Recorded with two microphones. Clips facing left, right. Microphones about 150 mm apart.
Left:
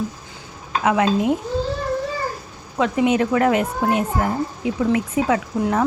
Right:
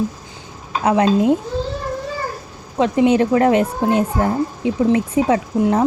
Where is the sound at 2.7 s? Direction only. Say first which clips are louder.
Right 4 dB; 30° right (ahead or behind).